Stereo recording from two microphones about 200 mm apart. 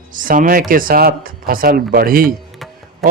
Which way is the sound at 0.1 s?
40° right (ahead or behind).